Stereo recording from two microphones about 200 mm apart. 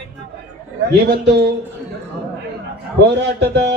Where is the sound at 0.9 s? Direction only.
55° right (ahead or behind).